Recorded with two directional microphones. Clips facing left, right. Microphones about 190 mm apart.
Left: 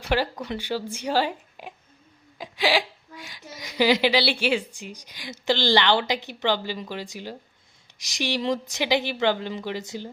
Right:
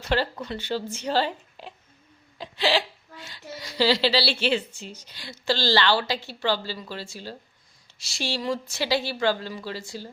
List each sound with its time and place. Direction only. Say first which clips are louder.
0.0 s speech: left 1 dB; 15° left (ahead or behind)